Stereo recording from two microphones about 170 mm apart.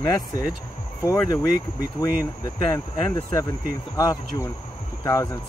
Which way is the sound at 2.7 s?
20° left (ahead or behind).